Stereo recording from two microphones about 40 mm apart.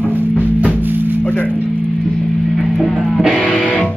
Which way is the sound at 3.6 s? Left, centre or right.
Left.